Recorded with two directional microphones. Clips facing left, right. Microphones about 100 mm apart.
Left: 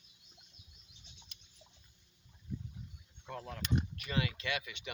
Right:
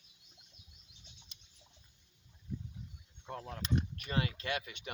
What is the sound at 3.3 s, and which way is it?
Speech, 35° right (ahead or behind).